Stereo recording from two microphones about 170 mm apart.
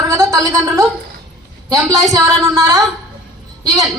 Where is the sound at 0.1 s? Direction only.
20° right (ahead or behind).